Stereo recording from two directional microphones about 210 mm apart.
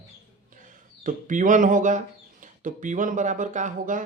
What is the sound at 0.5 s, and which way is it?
Speech, 40° right (ahead or behind).